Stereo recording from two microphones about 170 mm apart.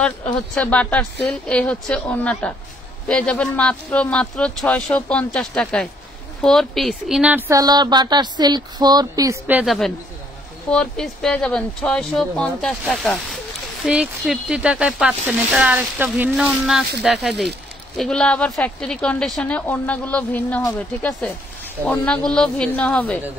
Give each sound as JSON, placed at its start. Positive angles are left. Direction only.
{"t": 0.0, "sound": "a woman's voice", "side_deg": 5}
{"t": 9.5, "sound": "a woman's voice", "side_deg": -5}